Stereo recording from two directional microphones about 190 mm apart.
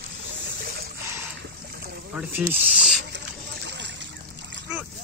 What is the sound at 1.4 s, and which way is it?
Splash, 55° right (ahead or behind).